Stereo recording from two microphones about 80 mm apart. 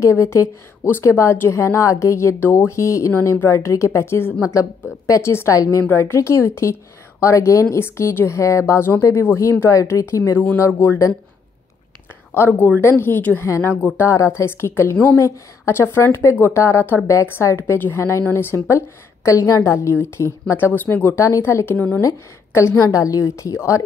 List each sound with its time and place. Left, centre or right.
0.0 s a woman's voice: left
3.1 s a woman's voice: left
4.6 s a woman's voice: left
9.7 s a woman's voice: left
12.4 s a woman's voice: left
17.6 s a woman's voice: left
20.7 s a woman's voice: left
21.2 s a woman's voice: left
21.7 s a woman's voice: centre
22.0 s a woman's voice: left
22.8 s a woman's voice: left